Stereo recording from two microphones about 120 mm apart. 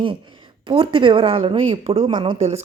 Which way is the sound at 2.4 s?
65° right (ahead or behind).